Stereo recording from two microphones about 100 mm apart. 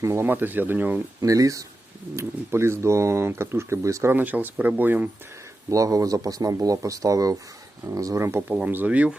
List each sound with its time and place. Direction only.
0.0 s speech: 30° right (ahead or behind)
1.2 s speech: 35° right (ahead or behind)
4.1 s speech: 15° right (ahead or behind)
5.7 s speech: 35° right (ahead or behind); by 9.1 s 15° right (ahead or behind)